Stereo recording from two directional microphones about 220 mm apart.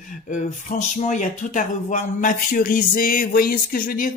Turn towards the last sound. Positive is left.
turn(degrees=40)  # may be behind; listen again after turning